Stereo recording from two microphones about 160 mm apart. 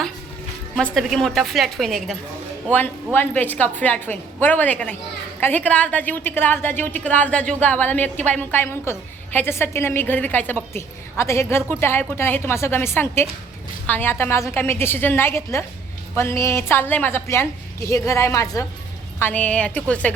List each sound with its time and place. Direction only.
0.8 s a woman's voice: centre (ahead or behind)
2.7 s a woman's voice: 10° left (ahead or behind)
19.2 s a woman's voice: 10° left (ahead or behind)